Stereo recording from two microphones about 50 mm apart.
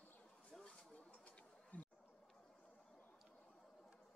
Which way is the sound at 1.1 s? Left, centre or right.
Left.